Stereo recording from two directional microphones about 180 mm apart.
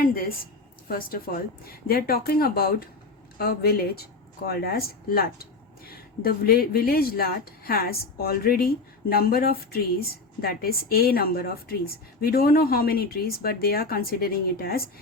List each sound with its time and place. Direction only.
0.0 s a woman's voice: 50° left (ahead or behind)